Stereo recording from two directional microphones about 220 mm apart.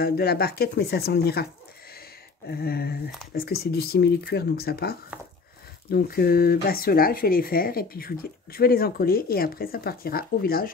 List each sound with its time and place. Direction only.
0.0 s speech: 45° left (ahead or behind)